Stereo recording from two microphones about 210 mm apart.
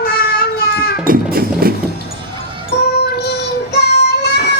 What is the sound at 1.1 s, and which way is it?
Music, 45° right (ahead or behind).